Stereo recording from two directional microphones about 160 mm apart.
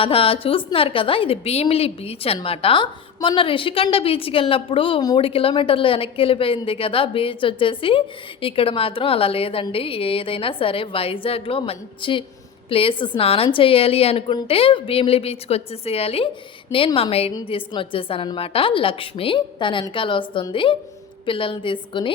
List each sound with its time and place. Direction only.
0.0 s a woman's voice: 35° left (ahead or behind)